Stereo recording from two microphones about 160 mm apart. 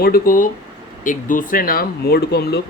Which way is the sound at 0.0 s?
60° left (ahead or behind).